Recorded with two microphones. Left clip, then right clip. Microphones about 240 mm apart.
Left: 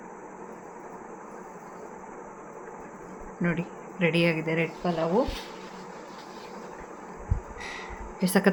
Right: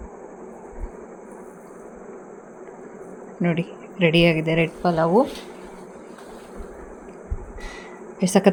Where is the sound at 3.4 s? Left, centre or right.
Centre.